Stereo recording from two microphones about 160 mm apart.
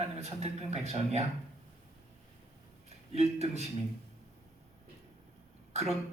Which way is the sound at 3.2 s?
40° right (ahead or behind).